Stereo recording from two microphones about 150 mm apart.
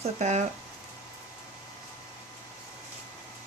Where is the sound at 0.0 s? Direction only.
50° right (ahead or behind).